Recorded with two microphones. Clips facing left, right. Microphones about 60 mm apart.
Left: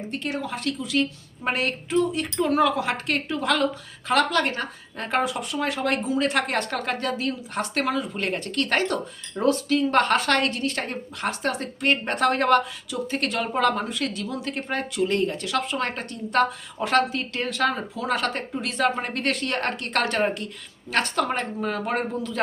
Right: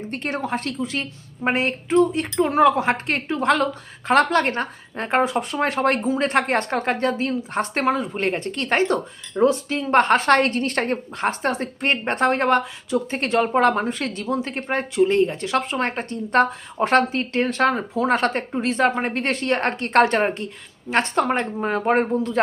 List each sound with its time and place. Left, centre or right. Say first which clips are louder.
0.1 s speech: right 5 dB; right